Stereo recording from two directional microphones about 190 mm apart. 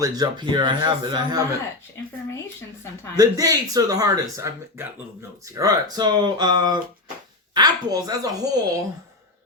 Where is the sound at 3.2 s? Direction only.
20° right (ahead or behind).